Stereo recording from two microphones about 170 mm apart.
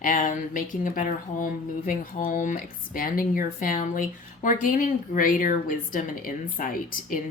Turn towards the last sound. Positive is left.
turn(degrees=55)  # may be behind; listen again after turning